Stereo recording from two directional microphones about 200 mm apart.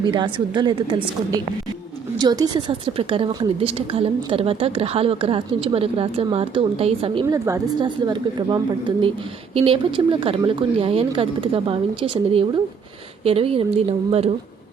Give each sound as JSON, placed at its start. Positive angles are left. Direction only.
{"t": 0.1, "sound": "a woman's voice", "side_deg": -25}
{"t": 7.3, "sound": "a woman's voice", "side_deg": -15}